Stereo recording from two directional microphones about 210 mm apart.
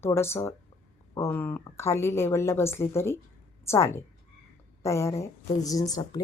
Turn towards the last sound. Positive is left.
turn(degrees=20)  # may be behind; listen again after turning